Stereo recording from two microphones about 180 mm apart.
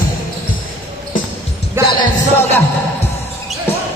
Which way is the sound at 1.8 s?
15° right (ahead or behind).